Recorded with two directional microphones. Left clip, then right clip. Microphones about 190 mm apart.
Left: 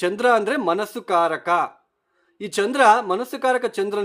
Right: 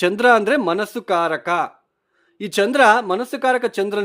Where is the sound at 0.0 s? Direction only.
25° right (ahead or behind).